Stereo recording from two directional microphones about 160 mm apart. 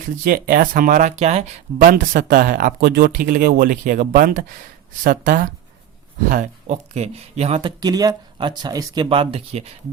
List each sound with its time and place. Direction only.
0.3 s speech: 65° right (ahead or behind); by 1.5 s 45° right (ahead or behind)
1.8 s speech: 60° right (ahead or behind); by 7.7 s 40° right (ahead or behind)
7.8 s speech: 25° right (ahead or behind)